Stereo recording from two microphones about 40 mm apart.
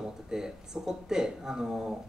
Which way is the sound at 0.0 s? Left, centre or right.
Centre.